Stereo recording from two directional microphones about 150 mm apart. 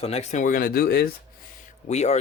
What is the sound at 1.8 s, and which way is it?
Speech, 50° left (ahead or behind).